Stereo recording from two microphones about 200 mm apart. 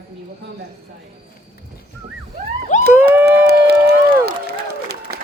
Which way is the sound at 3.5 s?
50° right (ahead or behind).